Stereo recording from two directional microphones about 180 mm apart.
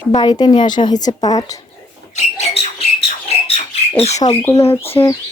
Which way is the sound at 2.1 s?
35° left (ahead or behind).